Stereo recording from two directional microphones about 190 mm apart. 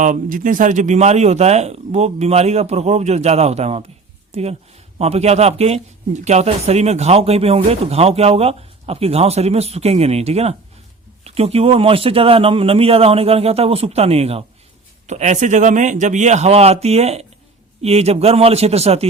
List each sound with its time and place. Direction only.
0.0 s speech: 45° right (ahead or behind)